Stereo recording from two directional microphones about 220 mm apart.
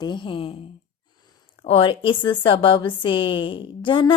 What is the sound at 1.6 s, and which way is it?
A woman's voice, 25° left (ahead or behind).